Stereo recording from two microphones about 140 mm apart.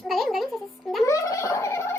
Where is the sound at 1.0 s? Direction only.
25° left (ahead or behind).